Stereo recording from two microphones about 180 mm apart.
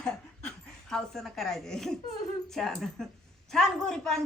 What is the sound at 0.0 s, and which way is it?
Chuckle, 5° left (ahead or behind).